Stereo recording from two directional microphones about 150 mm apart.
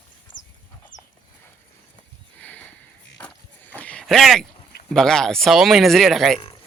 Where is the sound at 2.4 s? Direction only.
10° left (ahead or behind).